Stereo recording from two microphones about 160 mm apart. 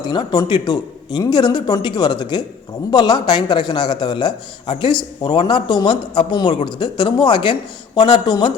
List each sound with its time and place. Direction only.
0.1 s speech: 30° left (ahead or behind)